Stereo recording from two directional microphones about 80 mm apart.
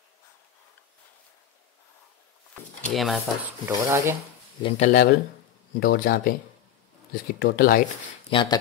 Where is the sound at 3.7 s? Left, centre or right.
Right.